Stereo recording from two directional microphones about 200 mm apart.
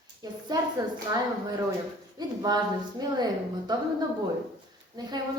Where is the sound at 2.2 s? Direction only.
20° right (ahead or behind).